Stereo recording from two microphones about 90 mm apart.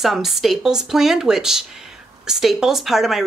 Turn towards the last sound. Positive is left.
turn(degrees=-5)  # may be behind; listen again after turning